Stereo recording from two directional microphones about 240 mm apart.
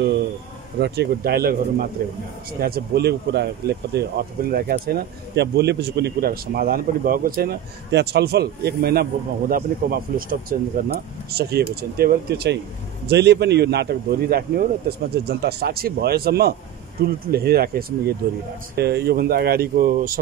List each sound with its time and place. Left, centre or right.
0.7 s speech: right